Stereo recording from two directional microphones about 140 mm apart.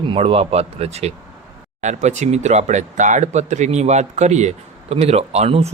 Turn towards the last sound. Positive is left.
turn(degrees=-45)  # may be behind; listen again after turning